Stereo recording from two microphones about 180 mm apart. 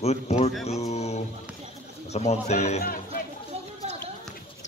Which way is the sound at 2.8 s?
50° left (ahead or behind).